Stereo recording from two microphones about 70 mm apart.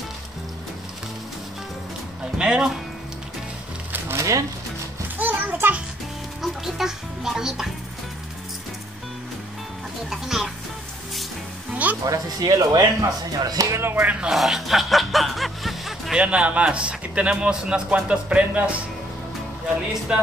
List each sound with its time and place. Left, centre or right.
2.3 s a man's voice: centre
4.1 s a sound: right
5.2 s a sound: right
6.4 s speech: centre
10.0 s speech: centre
11.7 s music: right
12.0 s speech: right
13.7 s speech: right
14.3 s music: centre
16.2 s a man's voice: centre
20.1 s a man's voice: centre